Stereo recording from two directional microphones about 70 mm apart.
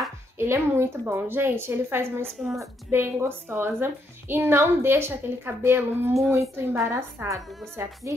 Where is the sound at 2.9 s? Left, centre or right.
Right.